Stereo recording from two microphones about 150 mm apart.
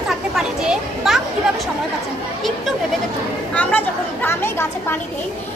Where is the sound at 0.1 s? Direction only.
5° right (ahead or behind).